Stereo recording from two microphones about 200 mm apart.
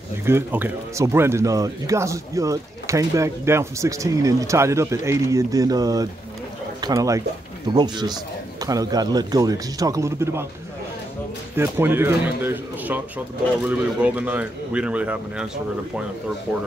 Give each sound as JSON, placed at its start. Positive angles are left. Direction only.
{"t": 0.2, "sound": "speech", "side_deg": -10}
{"t": 11.5, "sound": "speech", "side_deg": -10}